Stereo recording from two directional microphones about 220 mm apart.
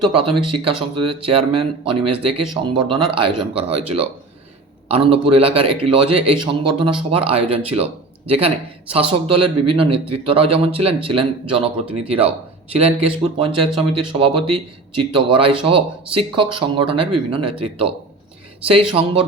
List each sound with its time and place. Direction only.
0.0 s a man's voice: 25° right (ahead or behind)